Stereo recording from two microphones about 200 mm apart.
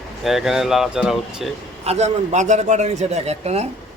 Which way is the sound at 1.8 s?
30° right (ahead or behind).